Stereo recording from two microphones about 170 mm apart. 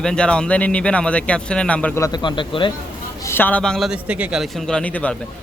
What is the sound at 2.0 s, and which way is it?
Speech, 25° left (ahead or behind).